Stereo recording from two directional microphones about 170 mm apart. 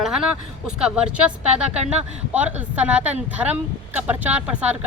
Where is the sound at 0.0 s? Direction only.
Centre (ahead or behind).